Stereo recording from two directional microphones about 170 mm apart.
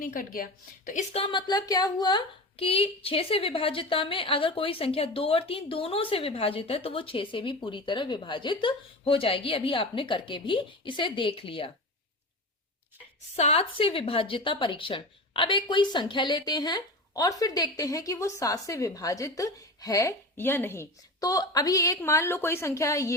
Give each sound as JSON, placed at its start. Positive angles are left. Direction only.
{"t": 0.0, "sound": "a woman's voice", "side_deg": 55}
{"t": 0.9, "sound": "speech", "side_deg": 40}
{"t": 13.3, "sound": "a woman's voice", "side_deg": 40}